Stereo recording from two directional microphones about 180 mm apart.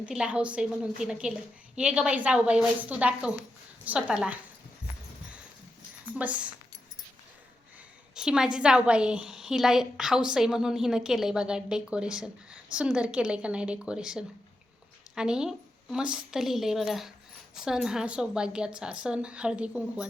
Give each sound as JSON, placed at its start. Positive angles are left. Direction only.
{"t": 0.0, "sound": "a woman's voice", "side_deg": -5}
{"t": 6.1, "sound": "a woman's voice", "side_deg": -5}
{"t": 8.1, "sound": "a woman's voice", "side_deg": -5}